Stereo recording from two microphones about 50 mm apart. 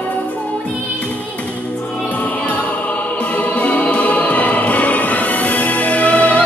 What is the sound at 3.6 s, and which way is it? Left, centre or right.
Music, left.